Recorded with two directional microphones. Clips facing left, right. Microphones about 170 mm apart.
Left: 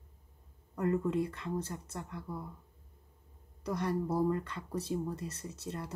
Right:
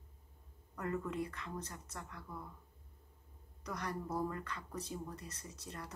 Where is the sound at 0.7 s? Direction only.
25° left (ahead or behind).